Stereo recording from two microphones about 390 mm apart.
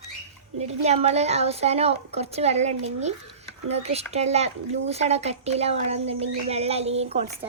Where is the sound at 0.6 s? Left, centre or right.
Centre.